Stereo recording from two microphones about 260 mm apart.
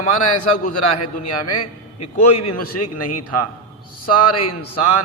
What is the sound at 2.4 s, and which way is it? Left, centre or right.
Mantra, left.